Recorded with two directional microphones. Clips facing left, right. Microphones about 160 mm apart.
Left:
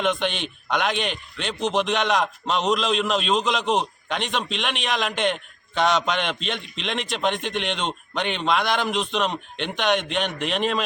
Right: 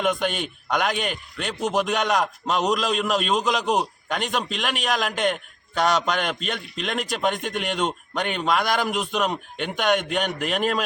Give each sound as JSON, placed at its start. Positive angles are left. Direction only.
{"t": 0.0, "sound": "a man's voice", "side_deg": -5}